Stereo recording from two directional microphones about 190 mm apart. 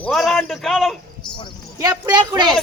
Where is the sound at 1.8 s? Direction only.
20° right (ahead or behind).